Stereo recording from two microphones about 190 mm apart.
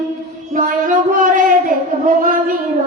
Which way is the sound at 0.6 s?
45° right (ahead or behind).